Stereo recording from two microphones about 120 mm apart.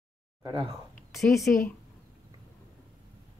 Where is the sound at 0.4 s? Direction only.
45° right (ahead or behind).